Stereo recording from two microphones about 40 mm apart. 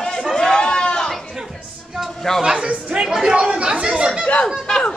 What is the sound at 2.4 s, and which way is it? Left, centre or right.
Speech, centre.